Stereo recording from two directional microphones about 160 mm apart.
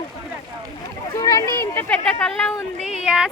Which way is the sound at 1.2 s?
20° left (ahead or behind).